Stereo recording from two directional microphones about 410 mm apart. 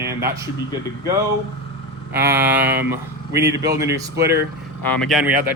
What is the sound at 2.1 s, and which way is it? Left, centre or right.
Speech, centre.